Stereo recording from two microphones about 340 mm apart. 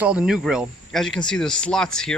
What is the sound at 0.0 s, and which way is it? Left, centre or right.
Speech, centre.